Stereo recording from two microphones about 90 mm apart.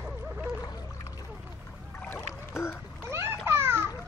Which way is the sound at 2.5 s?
30° left (ahead or behind).